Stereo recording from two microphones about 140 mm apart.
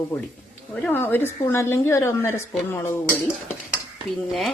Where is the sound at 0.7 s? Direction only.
10° left (ahead or behind).